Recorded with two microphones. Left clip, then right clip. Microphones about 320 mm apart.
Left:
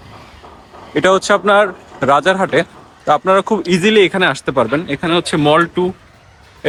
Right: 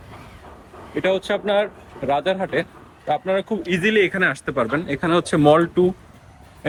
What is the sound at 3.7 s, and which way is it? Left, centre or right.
Speech, centre.